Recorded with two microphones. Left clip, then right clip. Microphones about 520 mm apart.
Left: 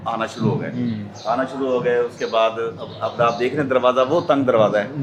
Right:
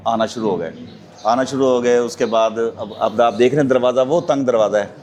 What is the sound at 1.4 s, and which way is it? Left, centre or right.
A man's voice, right.